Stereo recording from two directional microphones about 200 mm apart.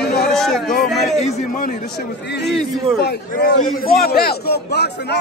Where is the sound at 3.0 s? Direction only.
50° left (ahead or behind).